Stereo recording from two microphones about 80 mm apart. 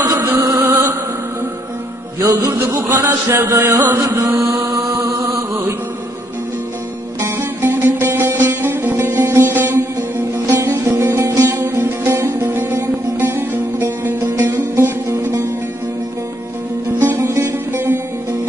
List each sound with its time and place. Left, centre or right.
0.0 s music: right
2.1 s music: right
7.2 s music: right
10.4 s music: right
11.0 s music: right
17.0 s music: right
17.7 s music: right